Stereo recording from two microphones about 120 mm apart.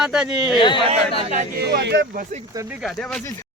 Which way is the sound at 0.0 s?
5° right (ahead or behind).